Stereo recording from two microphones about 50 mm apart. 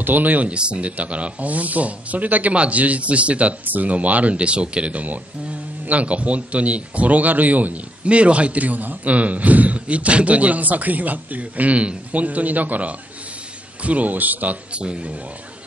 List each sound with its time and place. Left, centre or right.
0.0 s speech: right